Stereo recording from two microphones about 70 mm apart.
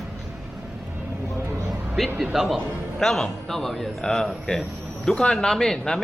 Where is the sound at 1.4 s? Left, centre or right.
Right.